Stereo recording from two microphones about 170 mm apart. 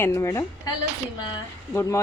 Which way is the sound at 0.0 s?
15° left (ahead or behind).